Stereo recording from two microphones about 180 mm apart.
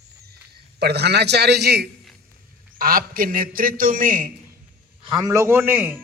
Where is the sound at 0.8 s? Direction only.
65° right (ahead or behind).